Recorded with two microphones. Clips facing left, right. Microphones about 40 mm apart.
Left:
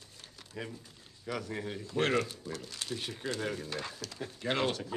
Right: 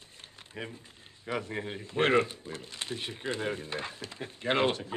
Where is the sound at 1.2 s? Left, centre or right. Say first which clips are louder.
Right 3 dB; right.